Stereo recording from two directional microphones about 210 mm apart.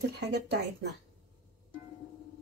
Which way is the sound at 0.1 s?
50° right (ahead or behind).